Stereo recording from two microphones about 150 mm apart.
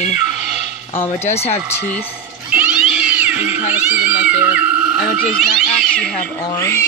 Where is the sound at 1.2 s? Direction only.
45° left (ahead or behind).